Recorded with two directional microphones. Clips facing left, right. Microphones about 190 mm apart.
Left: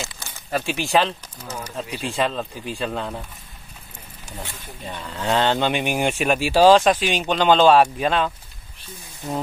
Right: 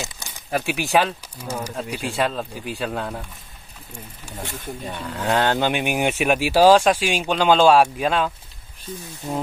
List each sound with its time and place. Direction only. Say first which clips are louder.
0.0 s crumpling: even; 15° right (ahead or behind)
0.9 s speech: even; 10° right (ahead or behind)
4.8 s speech: even; 10° right (ahead or behind)